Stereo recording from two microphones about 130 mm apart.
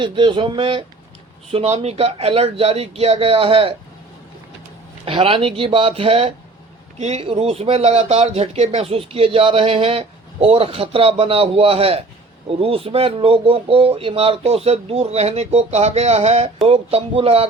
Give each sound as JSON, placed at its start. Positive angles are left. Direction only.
{"t": 0.0, "sound": "speech", "side_deg": -40}
{"t": 1.5, "sound": "speech", "side_deg": -55}
{"t": 5.0, "sound": "speech", "side_deg": -45}
{"t": 7.0, "sound": "speech", "side_deg": -55}